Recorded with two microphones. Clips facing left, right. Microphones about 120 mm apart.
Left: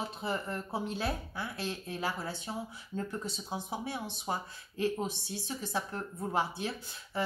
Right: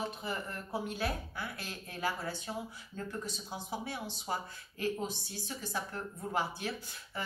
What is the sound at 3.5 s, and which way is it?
A woman's voice, 20° left (ahead or behind).